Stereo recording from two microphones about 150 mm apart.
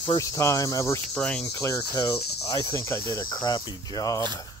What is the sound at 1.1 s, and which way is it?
Cricket, 5° left (ahead or behind).